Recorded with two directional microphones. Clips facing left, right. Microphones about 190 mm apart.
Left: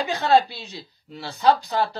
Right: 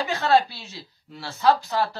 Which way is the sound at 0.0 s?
15° left (ahead or behind).